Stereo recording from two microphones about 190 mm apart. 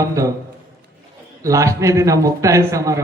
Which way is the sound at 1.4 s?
15° right (ahead or behind).